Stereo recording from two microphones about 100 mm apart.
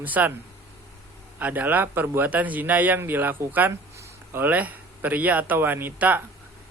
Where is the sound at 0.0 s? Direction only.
15° right (ahead or behind).